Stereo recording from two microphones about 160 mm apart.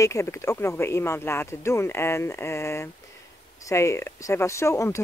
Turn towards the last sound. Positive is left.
turn(degrees=20)  # may be behind; listen again after turning